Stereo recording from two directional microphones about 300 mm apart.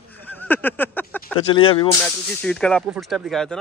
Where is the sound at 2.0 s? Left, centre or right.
Centre.